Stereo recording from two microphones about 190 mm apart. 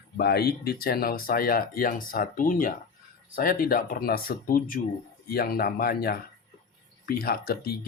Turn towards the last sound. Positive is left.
turn(degrees=55)  # may be behind; listen again after turning